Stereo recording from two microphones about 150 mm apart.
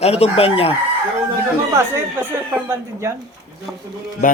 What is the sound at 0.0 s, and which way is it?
Chicken, 40° left (ahead or behind).